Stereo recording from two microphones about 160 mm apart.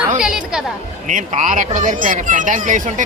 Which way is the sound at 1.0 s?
50° right (ahead or behind).